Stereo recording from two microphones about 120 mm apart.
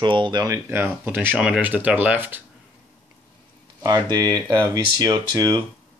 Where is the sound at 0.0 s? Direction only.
40° right (ahead or behind).